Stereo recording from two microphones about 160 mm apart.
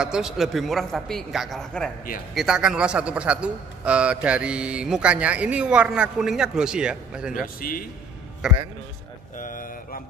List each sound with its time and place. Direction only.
0.0 s a woman's voice: 5° right (ahead or behind)
9.4 s mantra: 60° left (ahead or behind)